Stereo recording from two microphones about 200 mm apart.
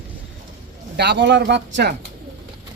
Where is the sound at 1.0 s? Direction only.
60° right (ahead or behind).